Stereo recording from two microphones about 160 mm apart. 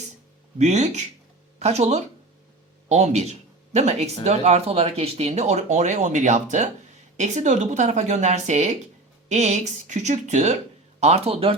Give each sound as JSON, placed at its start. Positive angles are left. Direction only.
{"t": 0.6, "sound": "speech", "side_deg": -45}